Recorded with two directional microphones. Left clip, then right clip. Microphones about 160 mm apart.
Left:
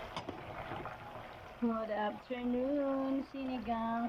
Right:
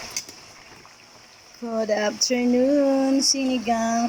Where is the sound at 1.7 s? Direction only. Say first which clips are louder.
Right 18 dB; 50° right (ahead or behind).